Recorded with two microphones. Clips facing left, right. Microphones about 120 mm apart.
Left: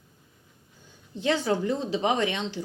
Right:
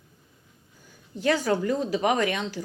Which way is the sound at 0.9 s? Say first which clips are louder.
Right 2 dB; 20° left (ahead or behind).